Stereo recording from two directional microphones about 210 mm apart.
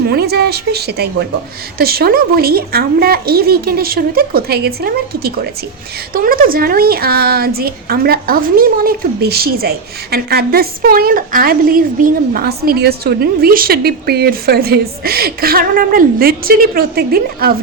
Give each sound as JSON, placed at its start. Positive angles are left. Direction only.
{"t": 0.1, "sound": "a woman's voice", "side_deg": -50}